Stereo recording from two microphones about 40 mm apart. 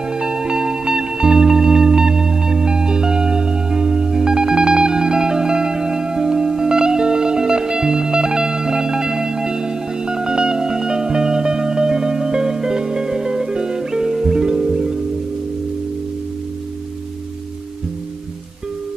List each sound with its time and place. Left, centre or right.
0.1 s music: centre